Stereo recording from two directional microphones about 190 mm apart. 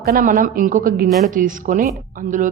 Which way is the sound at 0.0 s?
50° right (ahead or behind).